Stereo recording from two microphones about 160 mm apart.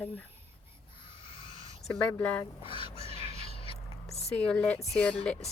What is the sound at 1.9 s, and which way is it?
Speech, 10° left (ahead or behind).